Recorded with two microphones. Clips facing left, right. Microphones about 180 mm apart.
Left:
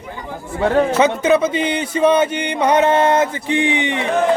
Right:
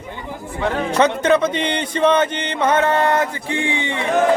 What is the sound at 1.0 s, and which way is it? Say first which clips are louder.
Music: left 1 dB; 5° left (ahead or behind).